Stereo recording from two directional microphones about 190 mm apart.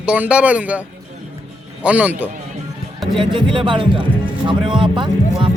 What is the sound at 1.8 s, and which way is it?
Speech, 5° right (ahead or behind).